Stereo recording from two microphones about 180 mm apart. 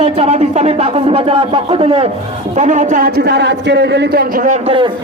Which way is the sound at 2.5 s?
40° right (ahead or behind).